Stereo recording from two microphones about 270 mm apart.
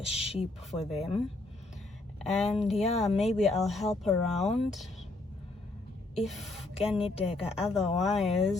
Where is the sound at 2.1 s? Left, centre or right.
Centre.